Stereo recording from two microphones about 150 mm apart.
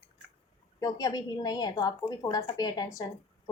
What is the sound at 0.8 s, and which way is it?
A woman's voice, 25° left (ahead or behind).